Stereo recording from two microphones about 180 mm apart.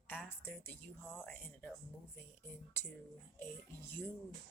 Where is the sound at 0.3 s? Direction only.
10° left (ahead or behind).